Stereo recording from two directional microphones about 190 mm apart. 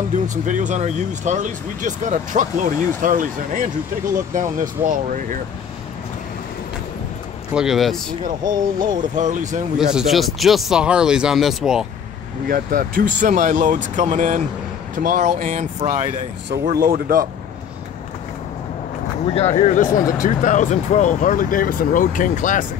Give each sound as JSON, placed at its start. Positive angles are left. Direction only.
{"t": 0.3, "sound": "speech", "side_deg": -40}
{"t": 7.5, "sound": "speech", "side_deg": 0}
{"t": 8.3, "sound": "speech", "side_deg": -45}
{"t": 9.8, "sound": "speech", "side_deg": 0}
{"t": 12.4, "sound": "speech", "side_deg": -50}
{"t": 16.4, "sound": "speech", "side_deg": -50}
{"t": 19.3, "sound": "speech", "side_deg": 35}